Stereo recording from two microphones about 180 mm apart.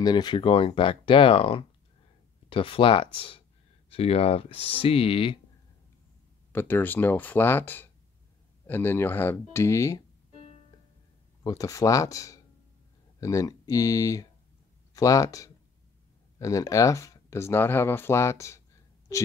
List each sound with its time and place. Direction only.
0.0 s speech: 25° left (ahead or behind)
6.5 s speech: 10° left (ahead or behind)
11.4 s speech: 20° left (ahead or behind)